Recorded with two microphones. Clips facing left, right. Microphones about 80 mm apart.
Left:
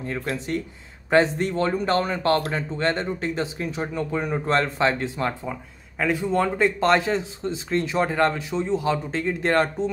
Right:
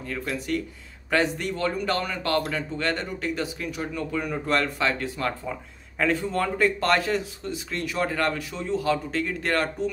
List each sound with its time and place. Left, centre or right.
0.0 s speech: left